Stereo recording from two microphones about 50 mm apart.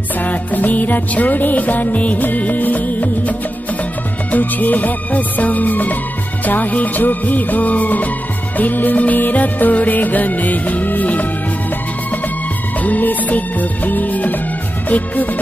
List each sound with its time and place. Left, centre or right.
0.2 s music: left
12.8 s music: left